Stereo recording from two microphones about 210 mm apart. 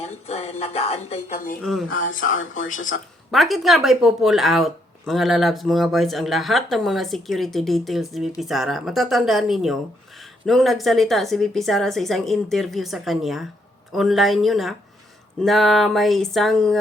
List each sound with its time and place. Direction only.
0.0 s speech: 30° left (ahead or behind)
1.9 s speech: 70° left (ahead or behind)
3.3 s speech: centre (ahead or behind)